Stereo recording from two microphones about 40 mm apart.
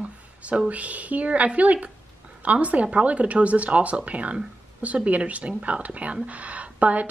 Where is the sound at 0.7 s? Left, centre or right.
Right.